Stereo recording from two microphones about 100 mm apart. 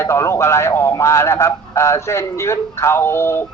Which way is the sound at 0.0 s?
30° left (ahead or behind).